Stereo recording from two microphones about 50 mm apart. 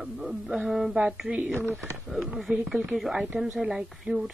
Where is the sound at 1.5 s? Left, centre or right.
Right.